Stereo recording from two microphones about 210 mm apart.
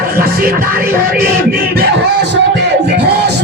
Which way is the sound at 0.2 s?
45° right (ahead or behind).